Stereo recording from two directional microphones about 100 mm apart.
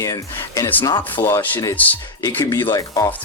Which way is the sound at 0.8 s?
50° left (ahead or behind).